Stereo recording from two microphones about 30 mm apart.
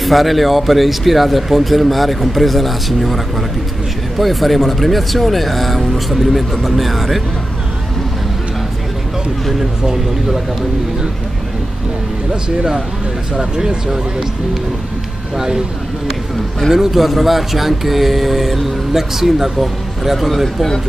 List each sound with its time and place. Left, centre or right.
0.0 s speech: centre
4.2 s speech: centre
9.8 s speech: centre
13.4 s speech: right
15.3 s speech: centre
16.7 s speech: centre
20.4 s speech: centre